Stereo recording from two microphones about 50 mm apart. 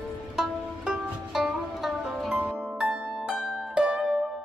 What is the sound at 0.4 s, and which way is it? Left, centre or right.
Music, centre.